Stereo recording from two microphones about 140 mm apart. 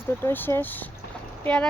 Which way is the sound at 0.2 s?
15° left (ahead or behind).